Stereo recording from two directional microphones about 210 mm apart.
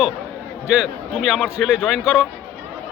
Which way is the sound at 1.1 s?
Centre (ahead or behind).